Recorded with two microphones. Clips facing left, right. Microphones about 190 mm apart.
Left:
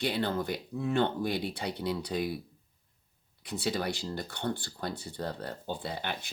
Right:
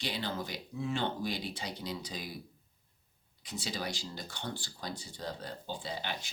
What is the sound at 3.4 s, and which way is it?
Speech, 60° left (ahead or behind).